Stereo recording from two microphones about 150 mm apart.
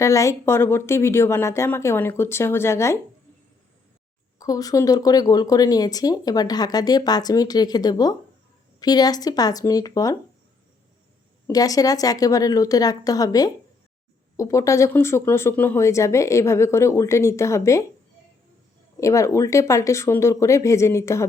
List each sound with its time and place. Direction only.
0.0 s speech: 20° left (ahead or behind)
4.4 s speech: 25° left (ahead or behind)
11.4 s speech: 25° left (ahead or behind)
18.9 s speech: 20° left (ahead or behind)